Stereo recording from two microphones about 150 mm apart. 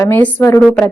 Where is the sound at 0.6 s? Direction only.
5° left (ahead or behind).